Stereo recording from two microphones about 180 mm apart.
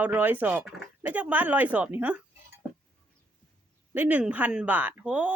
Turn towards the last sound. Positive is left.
turn(degrees=-5)  # may be behind; listen again after turning